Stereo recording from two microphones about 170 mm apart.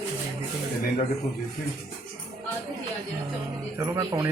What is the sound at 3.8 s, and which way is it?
Speech, 20° right (ahead or behind).